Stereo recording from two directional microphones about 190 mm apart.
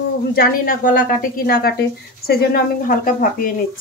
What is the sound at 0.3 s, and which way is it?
Speech, 50° left (ahead or behind).